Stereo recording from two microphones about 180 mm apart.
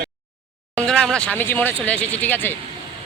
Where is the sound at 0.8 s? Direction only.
5° left (ahead or behind).